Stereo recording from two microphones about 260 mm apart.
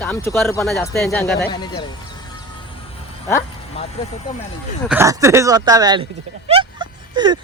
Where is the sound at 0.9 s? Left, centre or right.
Centre.